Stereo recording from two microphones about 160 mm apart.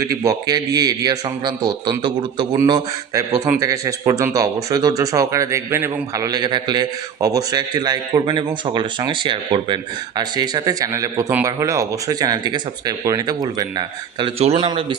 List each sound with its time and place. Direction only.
0.0 s a man's voice: 20° right (ahead or behind)